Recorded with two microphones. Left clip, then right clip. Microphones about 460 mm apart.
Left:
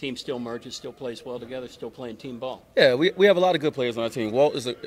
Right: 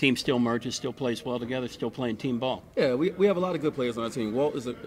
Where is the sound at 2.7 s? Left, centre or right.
Left.